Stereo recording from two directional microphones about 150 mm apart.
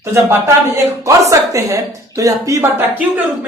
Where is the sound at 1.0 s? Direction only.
20° right (ahead or behind).